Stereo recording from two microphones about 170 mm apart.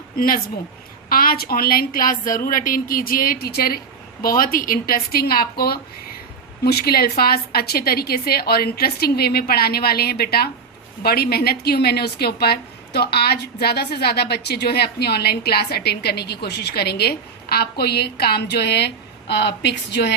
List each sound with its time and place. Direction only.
0.2 s a woman's voice: 60° left (ahead or behind); by 18.9 s 75° left (ahead or behind)
19.3 s a woman's voice: 90° left